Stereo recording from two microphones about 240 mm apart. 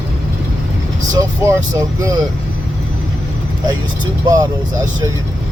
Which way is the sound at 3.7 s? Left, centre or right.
Centre.